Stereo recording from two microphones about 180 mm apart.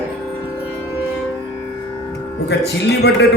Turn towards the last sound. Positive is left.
turn(degrees=65)  # may be behind; listen again after turning